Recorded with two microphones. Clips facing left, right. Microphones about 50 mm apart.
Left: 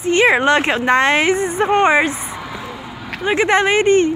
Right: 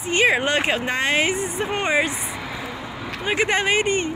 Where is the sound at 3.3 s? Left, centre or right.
Left.